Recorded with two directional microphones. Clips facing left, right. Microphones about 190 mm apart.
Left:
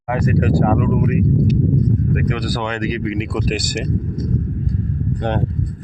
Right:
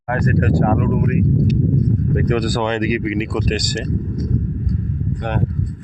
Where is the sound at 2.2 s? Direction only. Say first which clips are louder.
Right 3 dB; 45° right (ahead or behind).